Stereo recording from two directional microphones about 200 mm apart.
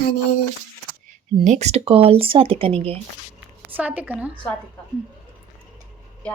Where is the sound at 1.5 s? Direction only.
35° right (ahead or behind).